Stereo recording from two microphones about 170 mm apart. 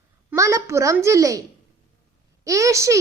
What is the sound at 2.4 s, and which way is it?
Speech, 20° right (ahead or behind).